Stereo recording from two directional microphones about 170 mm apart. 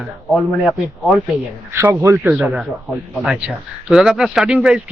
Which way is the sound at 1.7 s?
15° right (ahead or behind).